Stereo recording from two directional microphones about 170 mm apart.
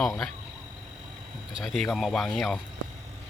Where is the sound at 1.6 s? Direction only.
Centre (ahead or behind).